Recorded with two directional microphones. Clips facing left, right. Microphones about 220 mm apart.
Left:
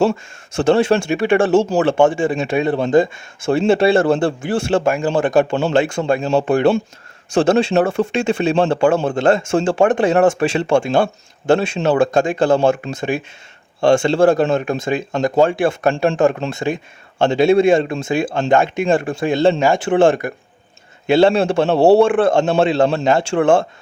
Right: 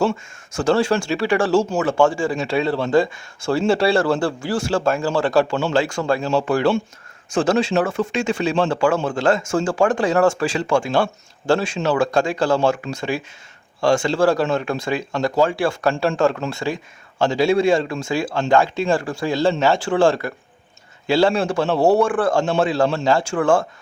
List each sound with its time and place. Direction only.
0.0 s speech: 25° left (ahead or behind)
2.0 s speech: 20° left (ahead or behind)